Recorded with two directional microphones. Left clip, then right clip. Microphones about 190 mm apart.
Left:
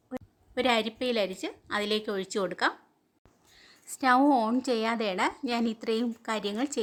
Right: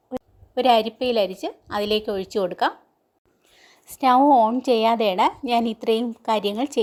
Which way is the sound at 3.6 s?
15° right (ahead or behind).